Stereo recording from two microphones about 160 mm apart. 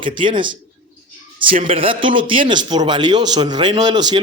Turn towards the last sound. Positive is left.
turn(degrees=-25)  # may be behind; listen again after turning